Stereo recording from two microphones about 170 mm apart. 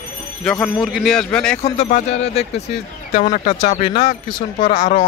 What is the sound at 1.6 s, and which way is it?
Speech, 40° left (ahead or behind).